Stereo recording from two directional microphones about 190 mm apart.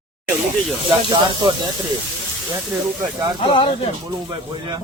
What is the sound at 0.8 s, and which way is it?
Speech, 25° right (ahead or behind).